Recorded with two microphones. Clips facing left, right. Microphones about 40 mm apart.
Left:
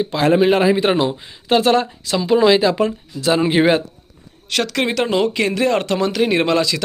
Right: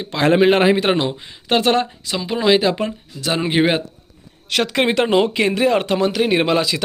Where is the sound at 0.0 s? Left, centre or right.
Right; by 4.7 s centre.